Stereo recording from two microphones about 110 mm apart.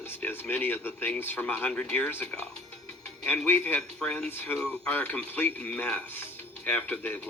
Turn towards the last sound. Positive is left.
turn(degrees=15)  # may be behind; listen again after turning